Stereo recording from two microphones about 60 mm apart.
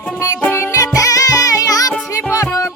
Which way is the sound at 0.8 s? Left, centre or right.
Left.